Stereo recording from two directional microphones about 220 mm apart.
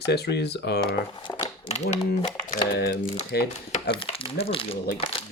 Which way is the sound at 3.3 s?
45° left (ahead or behind).